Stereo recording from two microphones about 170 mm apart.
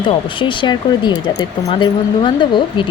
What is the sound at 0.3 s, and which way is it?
Speech, 30° left (ahead or behind).